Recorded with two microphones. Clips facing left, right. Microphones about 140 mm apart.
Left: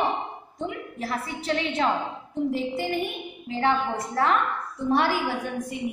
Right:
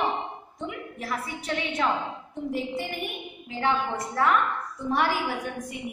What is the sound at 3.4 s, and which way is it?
Speech, 30° left (ahead or behind).